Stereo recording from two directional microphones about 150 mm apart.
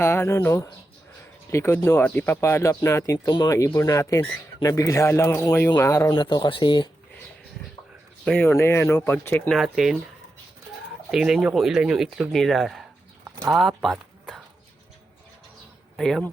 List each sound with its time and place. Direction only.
0.0 s speech: 15° left (ahead or behind)
8.2 s speech: centre (ahead or behind)
8.4 s speech: 15° left (ahead or behind)
9.6 s speech: 5° right (ahead or behind)
11.1 s speech: centre (ahead or behind)
16.0 s speech: centre (ahead or behind)